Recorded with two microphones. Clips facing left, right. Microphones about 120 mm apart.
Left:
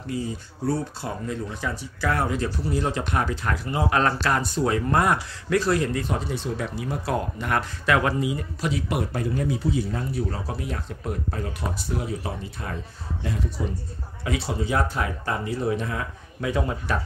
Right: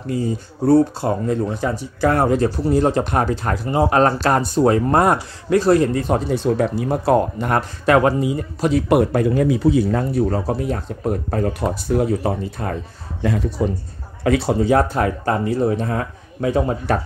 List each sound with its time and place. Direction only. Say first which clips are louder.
0.7 s speech: right 12 dB; 50° right (ahead or behind)
8.8 s speech: right 11 dB; 65° right (ahead or behind); by 10.0 s 80° right
10.1 s speech: right 10 dB; 45° right (ahead or behind)
13.2 s speech: right 10 dB; 75° right (ahead or behind)
14.2 s speech: right 10 dB; 55° right (ahead or behind); by 16.9 s 35° right (ahead or behind)